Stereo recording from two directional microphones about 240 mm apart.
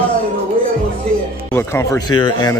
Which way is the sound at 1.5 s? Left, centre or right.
Centre.